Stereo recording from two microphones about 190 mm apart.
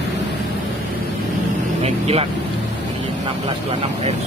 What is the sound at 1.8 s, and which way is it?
Speech, 30° right (ahead or behind).